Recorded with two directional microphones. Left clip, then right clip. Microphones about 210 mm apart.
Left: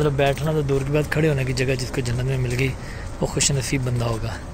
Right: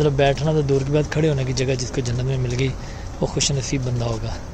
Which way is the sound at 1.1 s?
10° right (ahead or behind).